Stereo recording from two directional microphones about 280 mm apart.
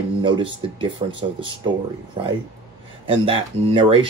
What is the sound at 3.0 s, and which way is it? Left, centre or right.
Speech, centre.